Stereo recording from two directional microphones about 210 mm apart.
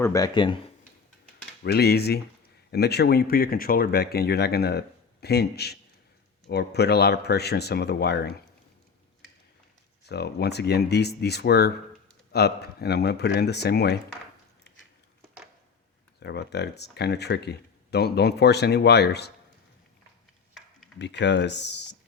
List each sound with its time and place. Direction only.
0.0 s speech: 15° left (ahead or behind)
1.6 s speech: 50° left (ahead or behind)
10.0 s speech: 50° left (ahead or behind)
16.2 s speech: 55° left (ahead or behind)
21.0 s speech: 55° left (ahead or behind)